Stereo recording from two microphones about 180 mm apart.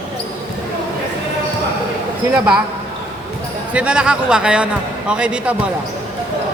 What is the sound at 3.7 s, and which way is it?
Speech, 5° right (ahead or behind).